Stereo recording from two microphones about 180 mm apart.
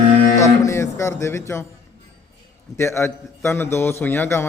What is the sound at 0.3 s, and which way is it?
Speech, 15° left (ahead or behind).